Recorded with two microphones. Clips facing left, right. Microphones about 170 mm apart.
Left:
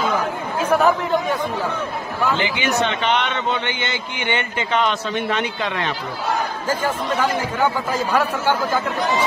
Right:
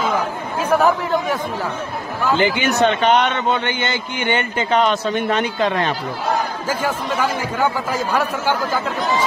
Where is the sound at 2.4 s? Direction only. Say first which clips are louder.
Right 5 dB; 45° right (ahead or behind).